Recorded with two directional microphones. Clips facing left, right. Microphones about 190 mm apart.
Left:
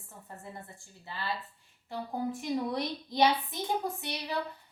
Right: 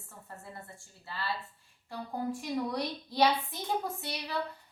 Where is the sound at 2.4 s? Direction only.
20° left (ahead or behind).